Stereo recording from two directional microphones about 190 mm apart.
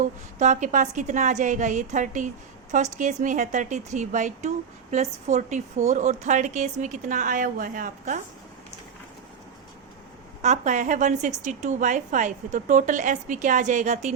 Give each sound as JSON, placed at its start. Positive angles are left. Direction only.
{"t": 0.0, "sound": "a woman's voice", "side_deg": -40}
{"t": 10.4, "sound": "a woman's voice", "side_deg": -40}